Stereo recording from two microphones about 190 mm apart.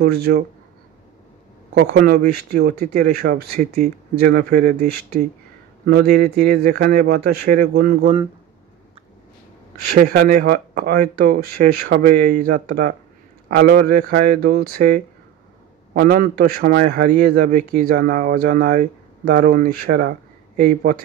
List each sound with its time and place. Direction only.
0.0 s a man's voice: 55° right (ahead or behind)
1.8 s a man's voice: 55° right (ahead or behind)
9.9 s a man's voice: 50° right (ahead or behind)